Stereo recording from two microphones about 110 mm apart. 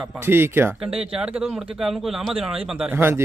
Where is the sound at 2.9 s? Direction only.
20° right (ahead or behind).